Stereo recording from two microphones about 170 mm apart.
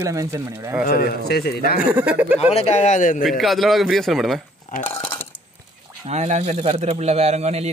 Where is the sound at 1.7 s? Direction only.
10° right (ahead or behind).